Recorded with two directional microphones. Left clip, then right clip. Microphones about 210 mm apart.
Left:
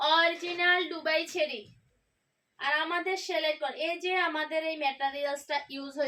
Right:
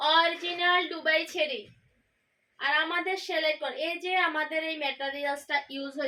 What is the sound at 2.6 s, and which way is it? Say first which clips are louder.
Speech: right 2 dB; 15° left (ahead or behind).